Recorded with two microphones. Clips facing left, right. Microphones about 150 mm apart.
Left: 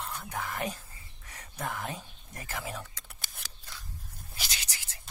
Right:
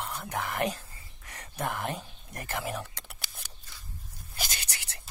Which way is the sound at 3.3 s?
75° left (ahead or behind).